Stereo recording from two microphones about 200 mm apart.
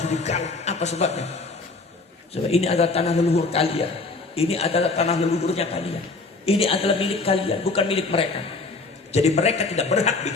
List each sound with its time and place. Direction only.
0.0 s a man's voice: 35° left (ahead or behind)
2.3 s a man's voice: 30° left (ahead or behind)